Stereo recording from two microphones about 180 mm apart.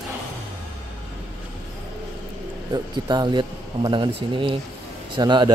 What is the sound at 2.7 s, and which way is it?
Speech, 25° right (ahead or behind).